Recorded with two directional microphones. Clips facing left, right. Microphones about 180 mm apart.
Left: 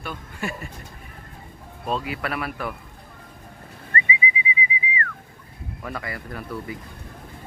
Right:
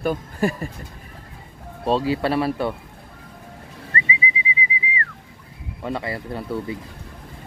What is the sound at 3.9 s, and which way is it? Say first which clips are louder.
Whistling: even; 30° right (ahead or behind).